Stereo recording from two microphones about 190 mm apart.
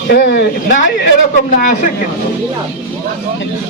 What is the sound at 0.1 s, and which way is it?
Speech, 55° left (ahead or behind).